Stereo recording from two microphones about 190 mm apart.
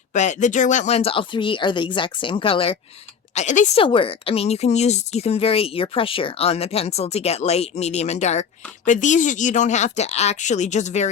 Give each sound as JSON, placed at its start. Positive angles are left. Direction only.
{"t": 0.1, "sound": "speech", "side_deg": 40}
{"t": 3.3, "sound": "speech", "side_deg": 40}
{"t": 3.8, "sound": "speech", "side_deg": 30}